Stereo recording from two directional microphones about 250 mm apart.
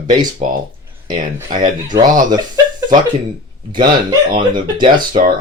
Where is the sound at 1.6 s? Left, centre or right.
Centre.